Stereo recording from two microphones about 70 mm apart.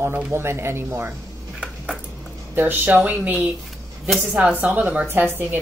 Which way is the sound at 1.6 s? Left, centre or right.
Centre.